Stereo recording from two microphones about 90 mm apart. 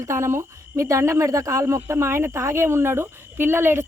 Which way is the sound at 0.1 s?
30° right (ahead or behind).